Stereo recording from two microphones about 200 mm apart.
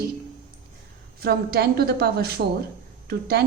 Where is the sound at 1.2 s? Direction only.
50° right (ahead or behind).